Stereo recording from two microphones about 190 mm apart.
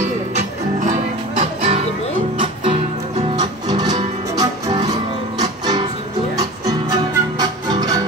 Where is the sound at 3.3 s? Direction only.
20° right (ahead or behind).